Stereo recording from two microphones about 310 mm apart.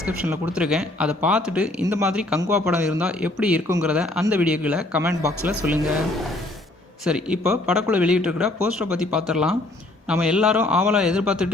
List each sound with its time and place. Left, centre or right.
0.0 s speech: centre
7.0 s speech: centre